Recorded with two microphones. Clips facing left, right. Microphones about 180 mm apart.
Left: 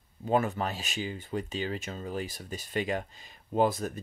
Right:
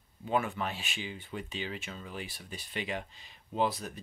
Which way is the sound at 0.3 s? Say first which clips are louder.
Left 4 dB; 40° left (ahead or behind).